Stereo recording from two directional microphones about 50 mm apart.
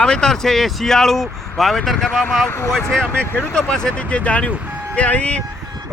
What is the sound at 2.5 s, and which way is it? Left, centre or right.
Speech, left.